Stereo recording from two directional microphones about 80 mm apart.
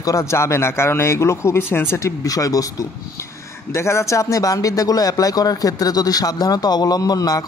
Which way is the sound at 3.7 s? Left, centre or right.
Left.